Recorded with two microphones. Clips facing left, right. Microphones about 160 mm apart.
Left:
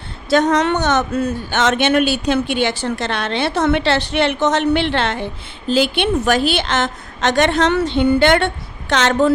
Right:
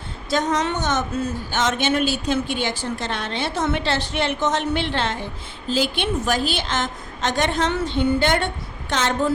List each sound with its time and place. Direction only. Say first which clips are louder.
0.3 s speech: left 7 dB; 70° left (ahead or behind)